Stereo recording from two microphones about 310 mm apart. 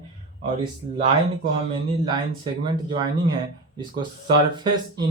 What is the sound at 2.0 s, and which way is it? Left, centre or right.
Speech, centre.